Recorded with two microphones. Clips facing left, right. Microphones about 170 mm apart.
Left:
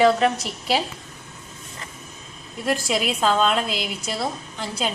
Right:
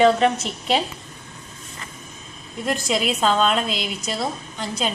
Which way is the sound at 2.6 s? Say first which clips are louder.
Even; 5° left (ahead or behind).